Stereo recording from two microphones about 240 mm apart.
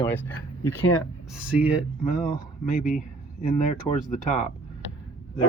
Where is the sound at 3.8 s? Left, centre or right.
Left.